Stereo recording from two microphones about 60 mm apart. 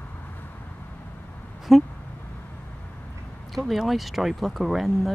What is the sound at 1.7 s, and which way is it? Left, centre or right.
Speech, centre.